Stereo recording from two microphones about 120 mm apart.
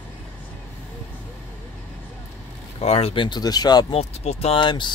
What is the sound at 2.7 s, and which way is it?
Speech, 55° left (ahead or behind).